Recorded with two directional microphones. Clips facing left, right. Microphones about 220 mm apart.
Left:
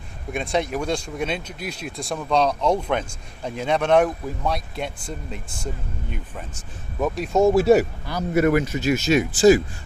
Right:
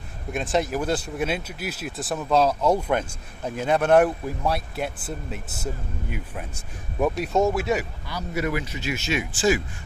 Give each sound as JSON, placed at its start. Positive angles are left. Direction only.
{"t": 0.3, "sound": "speech", "side_deg": 0}
{"t": 7.5, "sound": "speech", "side_deg": 35}